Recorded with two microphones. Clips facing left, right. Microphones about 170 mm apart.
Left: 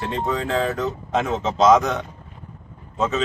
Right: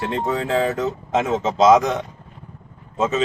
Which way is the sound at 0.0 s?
20° right (ahead or behind).